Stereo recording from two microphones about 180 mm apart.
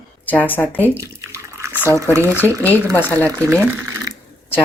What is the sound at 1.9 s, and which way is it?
Speech, 15° right (ahead or behind).